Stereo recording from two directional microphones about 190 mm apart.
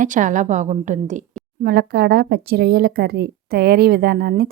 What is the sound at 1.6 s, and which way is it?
A woman's voice, 55° right (ahead or behind).